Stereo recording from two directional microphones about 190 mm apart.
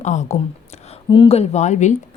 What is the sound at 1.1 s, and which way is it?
Speech, 30° left (ahead or behind).